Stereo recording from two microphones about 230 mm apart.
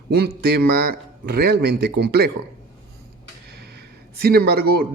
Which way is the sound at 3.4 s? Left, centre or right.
Right.